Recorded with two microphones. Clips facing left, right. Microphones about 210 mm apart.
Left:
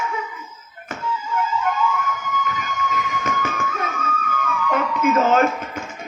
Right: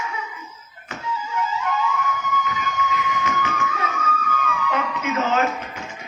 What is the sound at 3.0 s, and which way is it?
Music, 50° left (ahead or behind).